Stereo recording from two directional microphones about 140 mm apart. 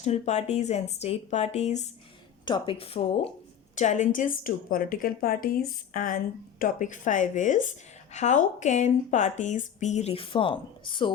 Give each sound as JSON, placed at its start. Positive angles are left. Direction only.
{"t": 0.0, "sound": "a woman's voice", "side_deg": 55}
{"t": 2.4, "sound": "speech", "side_deg": 35}
{"t": 3.8, "sound": "a woman's voice", "side_deg": 60}